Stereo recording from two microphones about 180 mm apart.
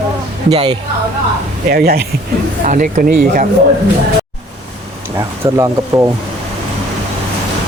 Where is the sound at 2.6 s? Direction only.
45° right (ahead or behind).